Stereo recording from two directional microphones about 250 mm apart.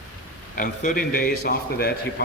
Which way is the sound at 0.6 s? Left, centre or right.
Left.